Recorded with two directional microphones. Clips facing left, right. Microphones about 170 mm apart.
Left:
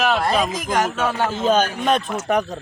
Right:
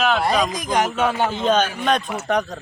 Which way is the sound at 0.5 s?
15° right (ahead or behind).